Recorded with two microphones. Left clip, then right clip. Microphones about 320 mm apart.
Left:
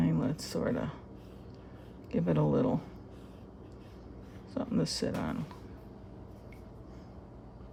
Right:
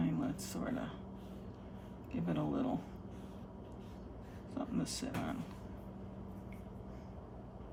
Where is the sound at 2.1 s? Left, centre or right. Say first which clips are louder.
Left 9 dB; left.